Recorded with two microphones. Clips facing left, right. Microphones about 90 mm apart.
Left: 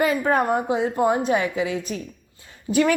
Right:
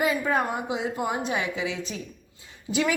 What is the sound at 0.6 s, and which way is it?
A woman's voice, 45° left (ahead or behind).